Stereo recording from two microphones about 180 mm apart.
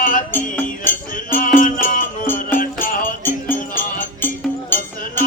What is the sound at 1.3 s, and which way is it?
Music, 45° left (ahead or behind).